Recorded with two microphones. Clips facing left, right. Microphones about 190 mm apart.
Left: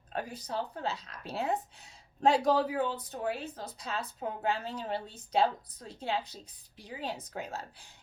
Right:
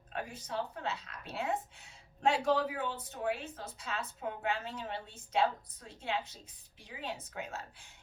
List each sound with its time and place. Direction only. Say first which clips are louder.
0.1 s speech: left 3 dB; 35° left (ahead or behind)